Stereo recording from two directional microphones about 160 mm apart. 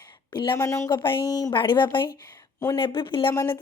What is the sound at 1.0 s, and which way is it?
Speech, 30° left (ahead or behind).